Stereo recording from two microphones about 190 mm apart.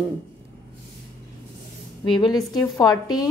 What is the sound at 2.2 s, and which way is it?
A woman's voice, 20° left (ahead or behind).